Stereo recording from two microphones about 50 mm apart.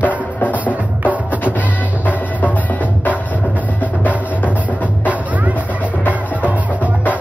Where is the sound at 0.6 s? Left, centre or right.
Right.